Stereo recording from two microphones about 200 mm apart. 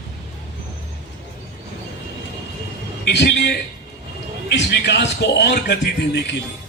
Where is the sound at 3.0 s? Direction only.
60° left (ahead or behind).